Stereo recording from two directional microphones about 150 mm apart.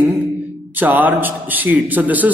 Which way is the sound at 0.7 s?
10° right (ahead or behind).